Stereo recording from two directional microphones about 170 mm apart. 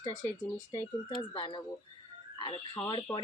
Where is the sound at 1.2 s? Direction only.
30° left (ahead or behind).